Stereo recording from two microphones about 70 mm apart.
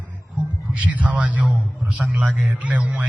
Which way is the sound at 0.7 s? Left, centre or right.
Right.